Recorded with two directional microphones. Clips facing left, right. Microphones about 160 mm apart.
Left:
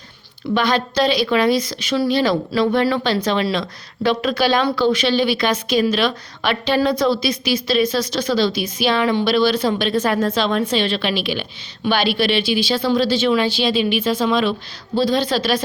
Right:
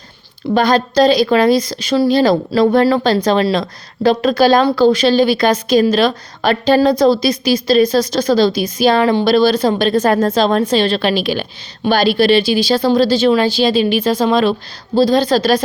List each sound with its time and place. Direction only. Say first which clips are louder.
0.5 s speech: right 6 dB; 40° right (ahead or behind)